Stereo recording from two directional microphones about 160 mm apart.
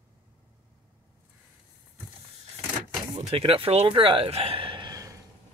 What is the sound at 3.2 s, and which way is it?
Speech, 40° right (ahead or behind).